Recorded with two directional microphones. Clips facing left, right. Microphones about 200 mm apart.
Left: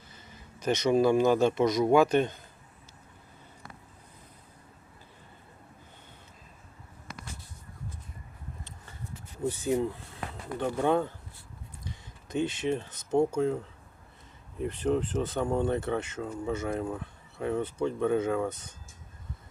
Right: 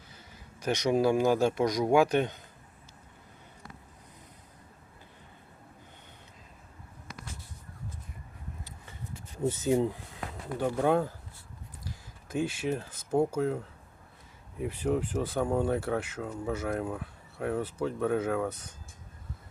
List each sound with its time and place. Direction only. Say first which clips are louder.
0.6 s speech: left 2 dB; 15° right (ahead or behind)
9.5 s speech: right 1 dB; 25° right (ahead or behind)
10.6 s speech: even; 5° right (ahead or behind)
14.6 s speech: left 1 dB; 10° right (ahead or behind)